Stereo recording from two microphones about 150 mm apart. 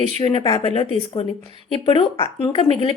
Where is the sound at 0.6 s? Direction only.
40° left (ahead or behind).